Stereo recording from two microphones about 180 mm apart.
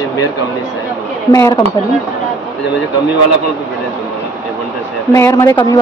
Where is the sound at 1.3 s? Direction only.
20° left (ahead or behind).